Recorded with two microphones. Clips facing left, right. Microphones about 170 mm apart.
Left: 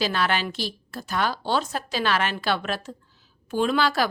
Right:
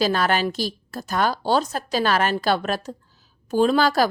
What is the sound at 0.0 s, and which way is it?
A woman's voice, 40° right (ahead or behind).